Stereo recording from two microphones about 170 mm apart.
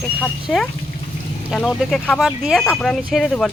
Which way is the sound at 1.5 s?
Centre (ahead or behind).